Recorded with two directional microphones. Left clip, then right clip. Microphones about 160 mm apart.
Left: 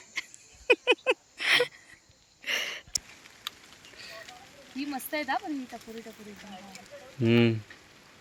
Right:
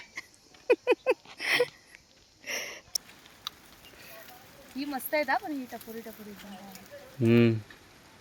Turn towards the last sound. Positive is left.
turn(degrees=-5)  # may be behind; listen again after turning